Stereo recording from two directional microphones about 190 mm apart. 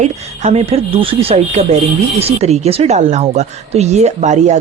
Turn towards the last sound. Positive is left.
turn(degrees=-40)  # may be behind; listen again after turning